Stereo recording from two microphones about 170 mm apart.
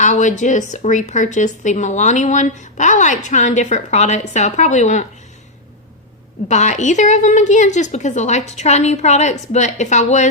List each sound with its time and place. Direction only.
0.0 s a woman's voice: 45° left (ahead or behind)
6.5 s a woman's voice: 45° left (ahead or behind)